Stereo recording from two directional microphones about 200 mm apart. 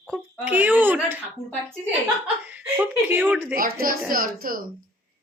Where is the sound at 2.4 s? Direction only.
10° right (ahead or behind).